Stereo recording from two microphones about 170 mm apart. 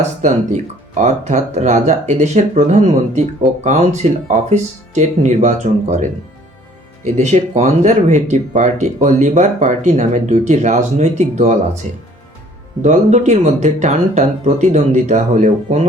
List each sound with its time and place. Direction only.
0.2 s speech: 45° right (ahead or behind)
12.8 s speech: 45° right (ahead or behind)